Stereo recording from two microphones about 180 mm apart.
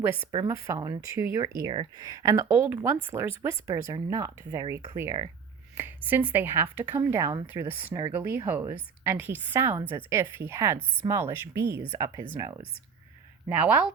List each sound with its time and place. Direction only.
0.4 s speech: 15° right (ahead or behind)
1.7 s speech: 30° right (ahead or behind)
2.0 s speech: 20° right (ahead or behind)
13.5 s speech: 10° right (ahead or behind)